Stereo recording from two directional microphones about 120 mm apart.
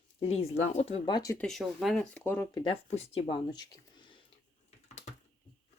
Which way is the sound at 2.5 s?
40° left (ahead or behind).